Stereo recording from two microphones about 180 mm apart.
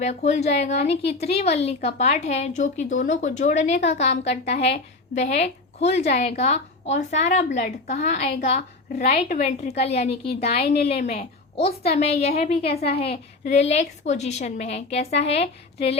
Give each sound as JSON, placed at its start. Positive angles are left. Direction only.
{"t": 0.0, "sound": "a woman's voice", "side_deg": 40}